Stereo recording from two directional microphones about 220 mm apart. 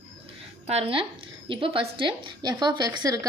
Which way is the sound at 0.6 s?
25° right (ahead or behind).